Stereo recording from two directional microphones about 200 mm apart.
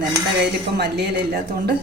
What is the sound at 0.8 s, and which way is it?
Speech, 55° right (ahead or behind).